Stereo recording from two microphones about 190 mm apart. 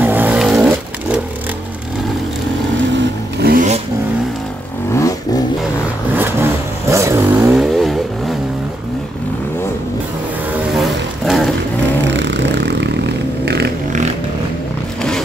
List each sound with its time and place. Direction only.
0.0 s a sound: 10° right (ahead or behind)
3.3 s vehicle: 55° right (ahead or behind)
4.9 s vehicle: 15° left (ahead or behind)
6.1 s vehicle: 10° right (ahead or behind)
7.5 s vehicle: centre (ahead or behind)
11.2 s a sound: centre (ahead or behind)
12.2 s vehicle: 65° right (ahead or behind)